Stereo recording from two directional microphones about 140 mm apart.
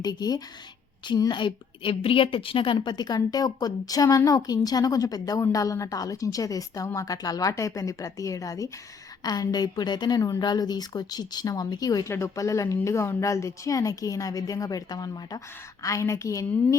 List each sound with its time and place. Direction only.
0.0 s a woman's voice: 30° left (ahead or behind)